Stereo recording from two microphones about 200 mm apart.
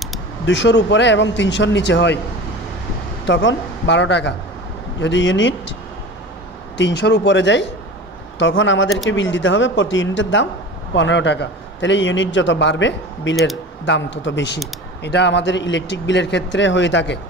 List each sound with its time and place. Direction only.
0.5 s a man's voice: 65° left (ahead or behind)
3.3 s a man's voice: 65° left (ahead or behind)
6.8 s a man's voice: 60° left (ahead or behind)